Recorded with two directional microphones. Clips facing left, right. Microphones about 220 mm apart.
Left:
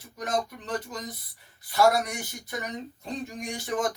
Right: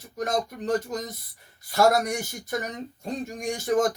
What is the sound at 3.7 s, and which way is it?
Speech, 40° right (ahead or behind).